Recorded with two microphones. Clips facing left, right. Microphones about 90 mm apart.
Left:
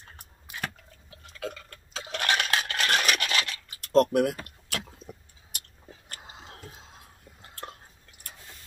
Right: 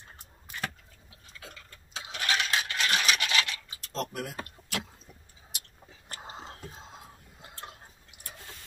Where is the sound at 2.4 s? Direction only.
50° left (ahead or behind).